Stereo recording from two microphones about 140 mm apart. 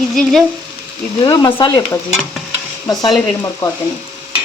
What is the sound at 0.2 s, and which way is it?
Speech, 5° left (ahead or behind).